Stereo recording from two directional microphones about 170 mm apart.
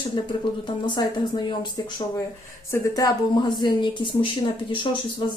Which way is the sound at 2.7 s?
20° left (ahead or behind).